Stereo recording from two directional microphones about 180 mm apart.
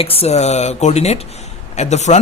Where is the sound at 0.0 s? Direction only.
30° left (ahead or behind).